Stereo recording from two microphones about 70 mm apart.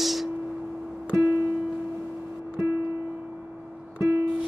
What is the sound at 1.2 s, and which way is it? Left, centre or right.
Music, centre.